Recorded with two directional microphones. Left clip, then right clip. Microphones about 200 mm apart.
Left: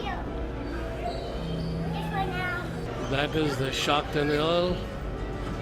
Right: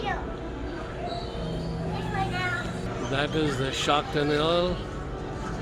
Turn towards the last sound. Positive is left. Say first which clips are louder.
# right 1 dB
turn(degrees=0)  # may be behind; listen again after turning